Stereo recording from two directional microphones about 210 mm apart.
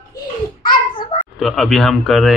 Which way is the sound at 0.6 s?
20° left (ahead or behind).